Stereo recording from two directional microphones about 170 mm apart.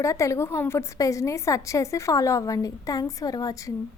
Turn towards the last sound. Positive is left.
turn(degrees=20)  # may be behind; listen again after turning